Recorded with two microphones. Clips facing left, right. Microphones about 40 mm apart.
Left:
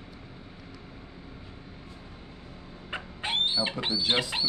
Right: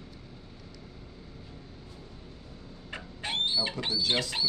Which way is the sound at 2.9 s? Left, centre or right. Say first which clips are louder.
Left 3 dB; centre.